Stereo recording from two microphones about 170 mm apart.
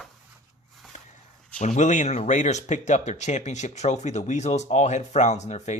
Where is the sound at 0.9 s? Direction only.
45° left (ahead or behind).